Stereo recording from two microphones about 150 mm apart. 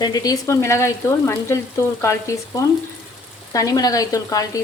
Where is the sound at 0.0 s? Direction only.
25° left (ahead or behind).